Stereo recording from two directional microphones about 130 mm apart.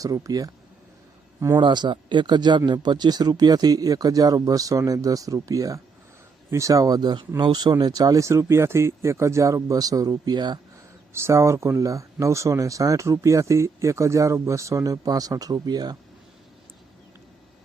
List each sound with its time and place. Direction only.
0.0 s speech: 25° right (ahead or behind)
1.5 s speech: 35° right (ahead or behind)
11.1 s speech: 20° right (ahead or behind)